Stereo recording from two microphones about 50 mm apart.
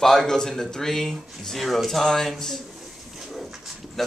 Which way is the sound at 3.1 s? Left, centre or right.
Centre.